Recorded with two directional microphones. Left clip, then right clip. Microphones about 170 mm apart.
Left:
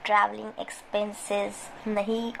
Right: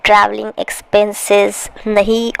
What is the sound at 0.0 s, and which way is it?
Speech, 55° right (ahead or behind).